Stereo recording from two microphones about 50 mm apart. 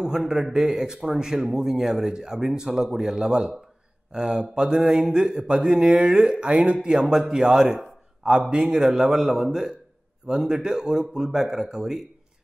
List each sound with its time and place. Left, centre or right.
0.3 s speech: centre